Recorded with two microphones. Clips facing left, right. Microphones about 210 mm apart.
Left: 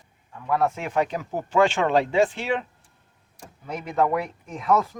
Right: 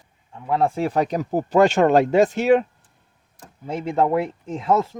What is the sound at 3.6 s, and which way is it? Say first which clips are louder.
Speech: right 3 dB; 25° right (ahead or behind).